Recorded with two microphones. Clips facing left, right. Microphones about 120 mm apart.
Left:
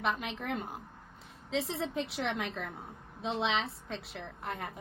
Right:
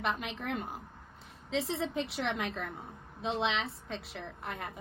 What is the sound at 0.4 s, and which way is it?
Speech, 65° right (ahead or behind).